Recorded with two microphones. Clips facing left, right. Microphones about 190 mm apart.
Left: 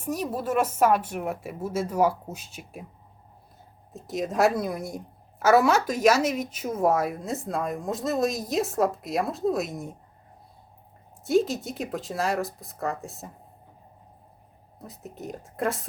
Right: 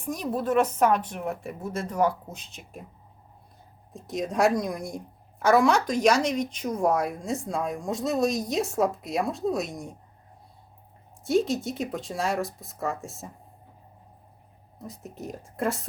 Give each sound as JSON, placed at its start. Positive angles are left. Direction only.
{"t": 0.0, "sound": "a woman's voice", "side_deg": 5}
{"t": 3.9, "sound": "a woman's voice", "side_deg": 0}
{"t": 11.2, "sound": "a woman's voice", "side_deg": 0}
{"t": 14.8, "sound": "a woman's voice", "side_deg": 0}